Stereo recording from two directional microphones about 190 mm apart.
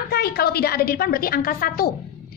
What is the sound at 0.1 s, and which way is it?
A woman's voice, 55° left (ahead or behind).